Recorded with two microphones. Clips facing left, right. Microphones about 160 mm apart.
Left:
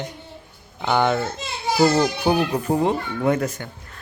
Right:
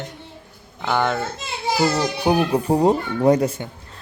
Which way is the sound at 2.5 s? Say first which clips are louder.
Right 4 dB; 35° right (ahead or behind).